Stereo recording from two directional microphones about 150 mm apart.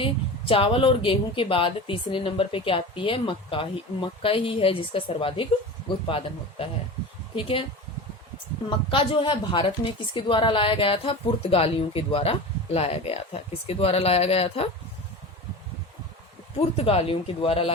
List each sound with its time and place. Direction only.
0.0 s a woman's voice: 35° left (ahead or behind)
8.9 s a woman's voice: 35° left (ahead or behind)
16.7 s a woman's voice: 40° left (ahead or behind)